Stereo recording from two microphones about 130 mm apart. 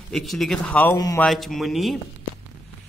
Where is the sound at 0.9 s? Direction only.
30° left (ahead or behind).